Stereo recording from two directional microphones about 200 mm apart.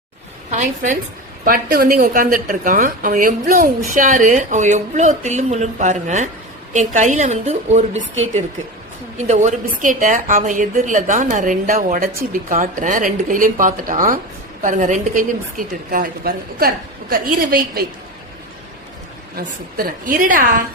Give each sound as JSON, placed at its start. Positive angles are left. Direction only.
{"t": 0.5, "sound": "a woman's voice", "side_deg": -40}
{"t": 9.1, "sound": "a woman's voice", "side_deg": -35}
{"t": 19.4, "sound": "a woman's voice", "side_deg": -45}